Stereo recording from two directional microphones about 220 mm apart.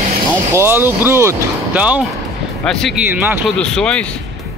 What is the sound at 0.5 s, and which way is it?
Speech, 10° right (ahead or behind).